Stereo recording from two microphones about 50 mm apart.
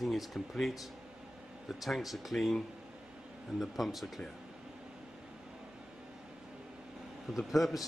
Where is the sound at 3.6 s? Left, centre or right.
Centre.